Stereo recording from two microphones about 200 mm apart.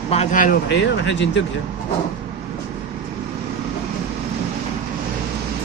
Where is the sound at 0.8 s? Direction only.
65° left (ahead or behind).